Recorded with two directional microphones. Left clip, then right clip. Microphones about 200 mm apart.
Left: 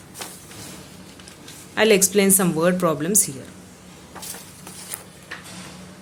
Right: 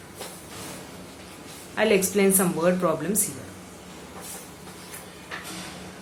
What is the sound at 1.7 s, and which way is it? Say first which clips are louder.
Speech: left 5 dB; 55° left (ahead or behind).